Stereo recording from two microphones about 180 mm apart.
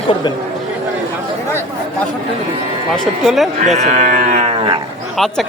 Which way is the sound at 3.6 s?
40° right (ahead or behind).